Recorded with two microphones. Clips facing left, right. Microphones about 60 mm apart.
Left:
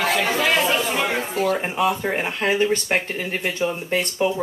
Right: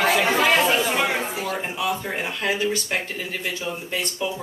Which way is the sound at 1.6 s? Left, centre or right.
Left.